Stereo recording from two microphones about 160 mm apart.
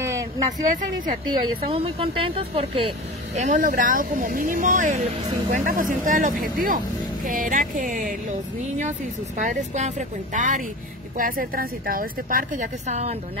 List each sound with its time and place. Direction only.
0.5 s speech: 55° right (ahead or behind)
1.7 s speech: 40° right (ahead or behind)
3.3 s a woman's voice: 50° right (ahead or behind)
9.4 s speech: 45° right (ahead or behind)
11.1 s a woman's voice: 60° right (ahead or behind); by 13.1 s 45° right (ahead or behind)